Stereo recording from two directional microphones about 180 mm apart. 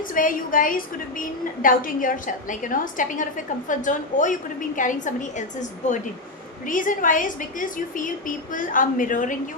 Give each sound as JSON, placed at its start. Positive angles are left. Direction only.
{"t": 0.1, "sound": "a woman's voice", "side_deg": 50}